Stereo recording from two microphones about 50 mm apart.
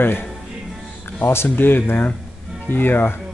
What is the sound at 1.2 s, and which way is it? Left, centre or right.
Speech, left.